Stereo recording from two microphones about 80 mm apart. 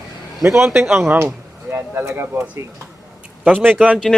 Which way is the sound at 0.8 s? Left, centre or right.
Centre.